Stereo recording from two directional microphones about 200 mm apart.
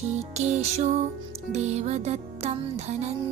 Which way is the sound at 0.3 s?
35° right (ahead or behind).